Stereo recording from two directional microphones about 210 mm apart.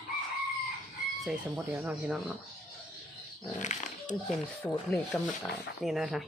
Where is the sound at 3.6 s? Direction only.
35° left (ahead or behind).